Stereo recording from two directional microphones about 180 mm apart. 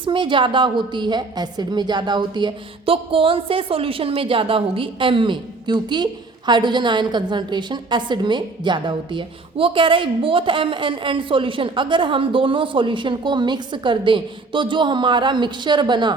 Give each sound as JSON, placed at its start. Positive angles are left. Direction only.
{"t": 0.0, "sound": "a woman's voice", "side_deg": -25}